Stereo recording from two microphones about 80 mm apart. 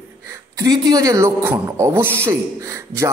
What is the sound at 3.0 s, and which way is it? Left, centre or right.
Speech, right.